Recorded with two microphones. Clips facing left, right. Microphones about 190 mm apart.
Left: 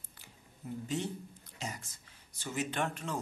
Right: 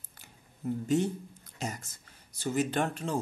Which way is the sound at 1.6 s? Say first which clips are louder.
Right 5 dB; 45° right (ahead or behind).